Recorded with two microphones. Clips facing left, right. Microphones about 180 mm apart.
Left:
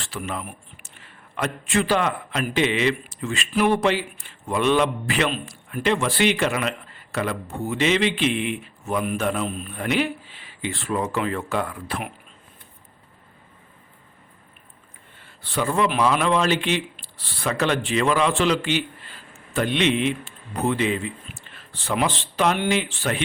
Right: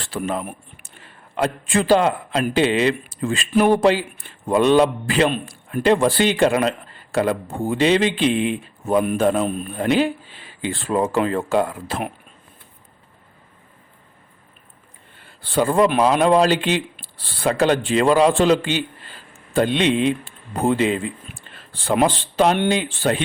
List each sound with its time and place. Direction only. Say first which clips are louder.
0.0 s speech: right 6 dB; 30° right (ahead or behind)
1.4 s a man's voice: right 3 dB; 30° right (ahead or behind)
15.4 s a man's voice: right 6 dB; 30° right (ahead or behind)